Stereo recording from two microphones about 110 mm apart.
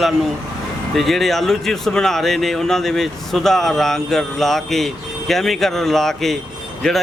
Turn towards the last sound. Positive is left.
turn(degrees=5)  # may be behind; listen again after turning